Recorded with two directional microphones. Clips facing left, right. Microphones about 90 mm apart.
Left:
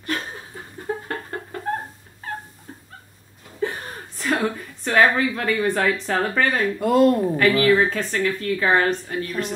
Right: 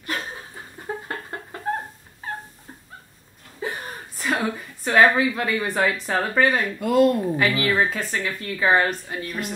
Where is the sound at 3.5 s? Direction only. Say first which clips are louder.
Left 3 dB; 5° right (ahead or behind).